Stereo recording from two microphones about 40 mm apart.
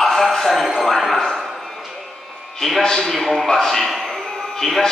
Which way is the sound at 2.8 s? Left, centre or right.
Centre.